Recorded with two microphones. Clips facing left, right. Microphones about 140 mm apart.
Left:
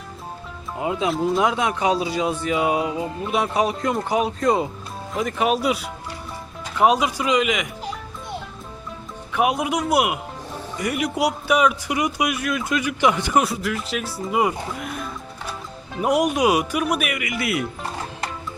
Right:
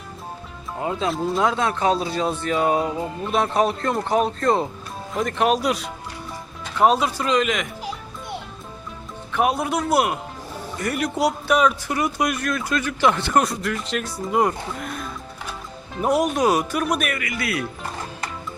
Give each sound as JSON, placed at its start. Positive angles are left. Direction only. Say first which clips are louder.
{"t": 0.8, "sound": "speech", "louder": "left 2 dB", "side_deg": 15}
{"t": 9.3, "sound": "speech", "louder": "even", "side_deg": 10}
{"t": 16.0, "sound": "speech", "louder": "left 1 dB", "side_deg": 10}